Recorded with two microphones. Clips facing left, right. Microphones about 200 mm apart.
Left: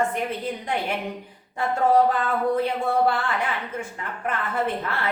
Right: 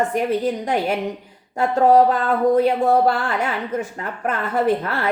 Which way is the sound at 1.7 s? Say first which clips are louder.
Right 5 dB; 40° right (ahead or behind).